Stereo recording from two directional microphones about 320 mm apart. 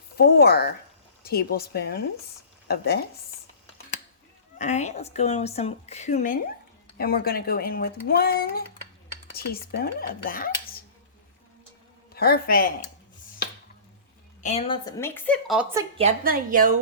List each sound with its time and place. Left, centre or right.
0.2 s a woman's voice: left
4.5 s a woman's voice: left
12.1 s a woman's voice: left
14.4 s speech: centre; by 16.7 s right